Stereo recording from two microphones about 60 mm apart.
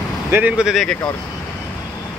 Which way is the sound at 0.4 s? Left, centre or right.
Right.